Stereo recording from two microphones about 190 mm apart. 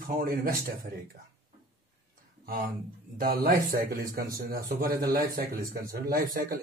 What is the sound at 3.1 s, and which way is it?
A man's voice, 50° right (ahead or behind).